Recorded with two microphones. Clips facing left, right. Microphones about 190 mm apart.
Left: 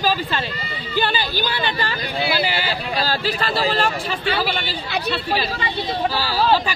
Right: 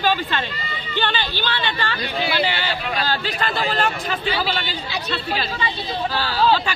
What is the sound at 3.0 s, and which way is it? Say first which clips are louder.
Speech: left 3 dB; 35° left (ahead or behind).